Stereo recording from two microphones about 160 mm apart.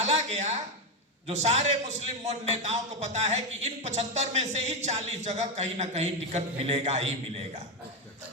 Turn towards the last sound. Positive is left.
turn(degrees=-45)  # may be behind; listen again after turning